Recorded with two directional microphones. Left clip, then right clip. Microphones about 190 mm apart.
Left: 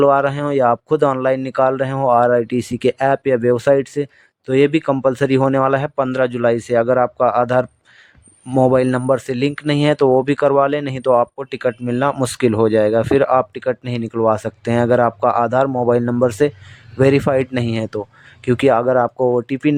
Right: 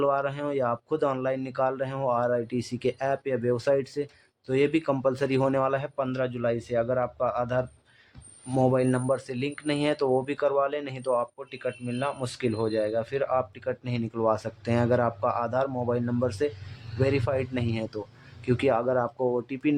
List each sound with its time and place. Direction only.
0.0 s a man's voice: 40° left (ahead or behind)